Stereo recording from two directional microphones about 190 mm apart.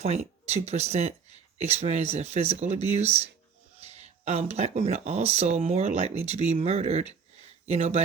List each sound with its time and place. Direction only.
0.0 s speech: 35° right (ahead or behind)